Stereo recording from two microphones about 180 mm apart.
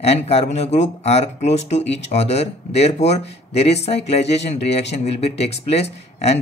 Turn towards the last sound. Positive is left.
turn(degrees=35)  # may be behind; listen again after turning